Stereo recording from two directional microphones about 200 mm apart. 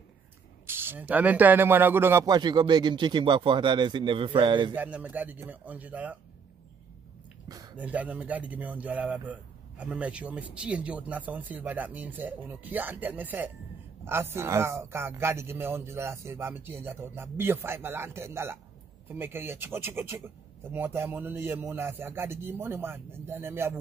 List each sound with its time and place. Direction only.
0.7 s speech: 10° right (ahead or behind)
4.7 s speech: 10° right (ahead or behind)
7.4 s a sound: 20° right (ahead or behind)
7.7 s speech: 5° right (ahead or behind)